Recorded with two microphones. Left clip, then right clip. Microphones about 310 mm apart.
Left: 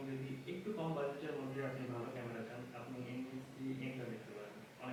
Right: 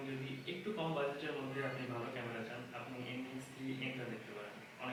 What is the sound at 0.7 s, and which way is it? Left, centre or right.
Speech, left.